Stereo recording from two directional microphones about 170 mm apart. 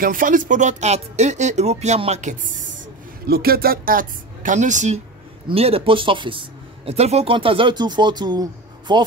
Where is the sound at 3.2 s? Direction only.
65° right (ahead or behind); by 5.0 s 45° right (ahead or behind).